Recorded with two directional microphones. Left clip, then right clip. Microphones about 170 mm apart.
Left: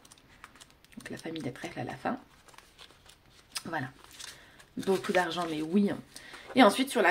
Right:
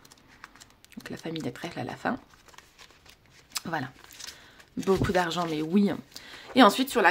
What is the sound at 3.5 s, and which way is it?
Speech, 35° right (ahead or behind).